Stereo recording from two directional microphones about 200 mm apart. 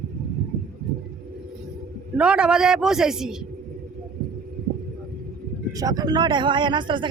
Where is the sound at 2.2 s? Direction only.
5° right (ahead or behind).